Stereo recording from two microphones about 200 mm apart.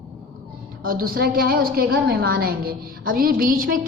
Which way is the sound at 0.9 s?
45° right (ahead or behind).